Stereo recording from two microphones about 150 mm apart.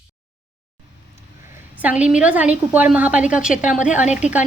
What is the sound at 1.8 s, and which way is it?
A woman's voice, 10° right (ahead or behind).